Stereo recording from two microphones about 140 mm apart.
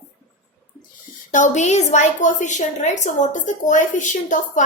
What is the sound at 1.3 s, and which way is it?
A woman's voice, 60° left (ahead or behind).